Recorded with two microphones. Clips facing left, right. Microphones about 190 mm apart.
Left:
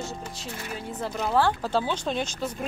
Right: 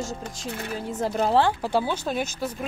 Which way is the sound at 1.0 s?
35° right (ahead or behind).